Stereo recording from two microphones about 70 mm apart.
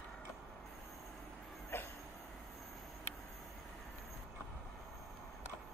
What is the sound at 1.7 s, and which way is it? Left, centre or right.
Train, left.